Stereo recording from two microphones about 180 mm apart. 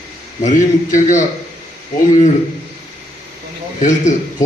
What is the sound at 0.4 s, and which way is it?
Speech, 45° left (ahead or behind).